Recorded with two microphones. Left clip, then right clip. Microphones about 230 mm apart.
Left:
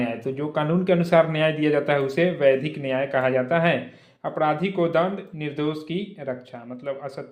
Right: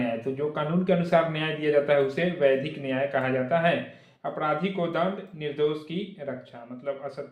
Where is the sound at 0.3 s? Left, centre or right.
Left.